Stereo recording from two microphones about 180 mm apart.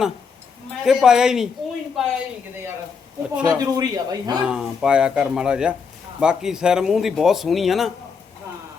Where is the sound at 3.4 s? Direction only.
20° right (ahead or behind).